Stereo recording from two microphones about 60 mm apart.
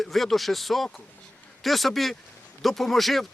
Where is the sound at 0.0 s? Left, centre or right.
Centre.